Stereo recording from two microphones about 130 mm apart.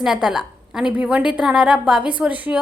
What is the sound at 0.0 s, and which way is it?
A woman's voice, 5° right (ahead or behind).